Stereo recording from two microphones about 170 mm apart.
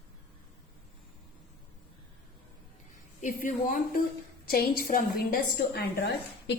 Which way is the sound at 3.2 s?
50° left (ahead or behind).